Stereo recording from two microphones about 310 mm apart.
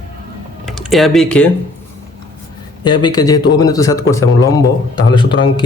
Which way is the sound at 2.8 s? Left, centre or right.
Centre.